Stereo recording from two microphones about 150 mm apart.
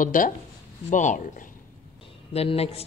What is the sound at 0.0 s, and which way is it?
Speech, 60° left (ahead or behind).